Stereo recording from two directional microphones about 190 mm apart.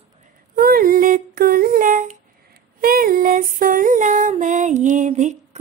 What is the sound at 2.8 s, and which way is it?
Female singing, 50° right (ahead or behind).